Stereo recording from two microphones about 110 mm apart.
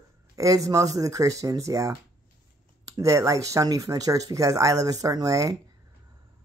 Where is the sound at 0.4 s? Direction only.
30° right (ahead or behind).